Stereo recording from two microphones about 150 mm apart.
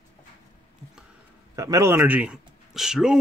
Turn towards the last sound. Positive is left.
turn(degrees=-5)  # may be behind; listen again after turning